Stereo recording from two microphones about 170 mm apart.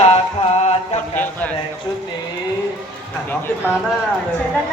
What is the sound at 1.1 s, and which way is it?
Music, 10° left (ahead or behind).